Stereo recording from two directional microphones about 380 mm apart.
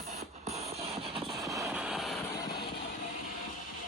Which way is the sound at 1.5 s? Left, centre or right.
Centre.